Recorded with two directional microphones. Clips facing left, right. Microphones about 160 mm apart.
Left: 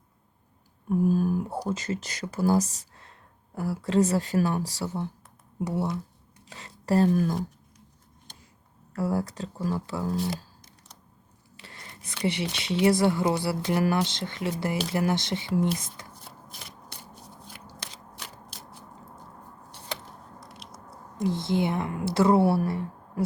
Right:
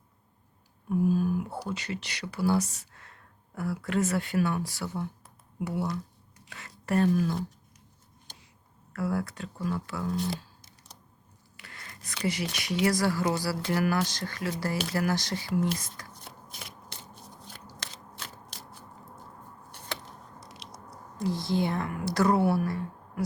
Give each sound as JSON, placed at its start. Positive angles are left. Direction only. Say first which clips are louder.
{"t": 0.9, "sound": "speech", "louder": "left 2 dB", "side_deg": 45}
{"t": 9.0, "sound": "speech", "louder": "left 3 dB", "side_deg": 35}
{"t": 11.5, "sound": "a sound", "louder": "left 2 dB", "side_deg": 30}
{"t": 12.2, "sound": "speech", "louder": "left 3 dB", "side_deg": 25}
{"t": 20.4, "sound": "biting", "louder": "left 1 dB", "side_deg": 0}
{"t": 21.2, "sound": "speech", "louder": "left 2 dB", "side_deg": 20}